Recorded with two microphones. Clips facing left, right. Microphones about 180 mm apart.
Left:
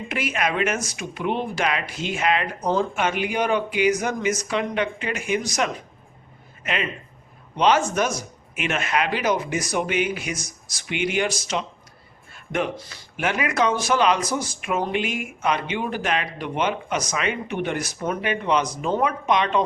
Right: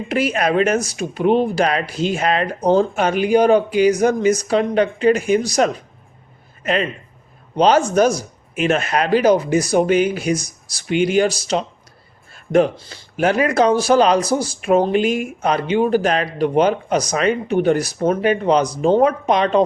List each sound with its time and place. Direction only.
0.1 s speech: 35° right (ahead or behind)